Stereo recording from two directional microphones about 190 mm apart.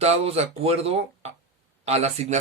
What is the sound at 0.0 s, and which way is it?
Speech, 35° right (ahead or behind).